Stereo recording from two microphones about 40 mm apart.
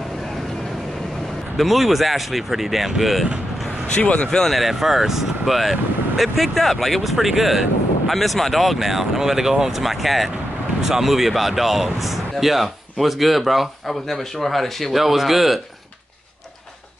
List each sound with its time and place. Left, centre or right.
1.6 s speech: centre
3.9 s speech: left
4.4 s speech: centre